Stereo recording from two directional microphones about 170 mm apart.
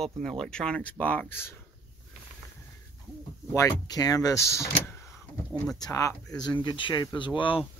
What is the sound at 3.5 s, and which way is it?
Speech, 20° left (ahead or behind).